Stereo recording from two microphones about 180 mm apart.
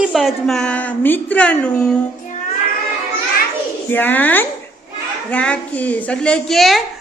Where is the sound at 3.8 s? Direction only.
10° left (ahead or behind).